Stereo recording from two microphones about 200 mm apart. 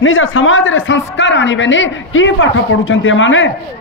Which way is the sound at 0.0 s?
75° left (ahead or behind).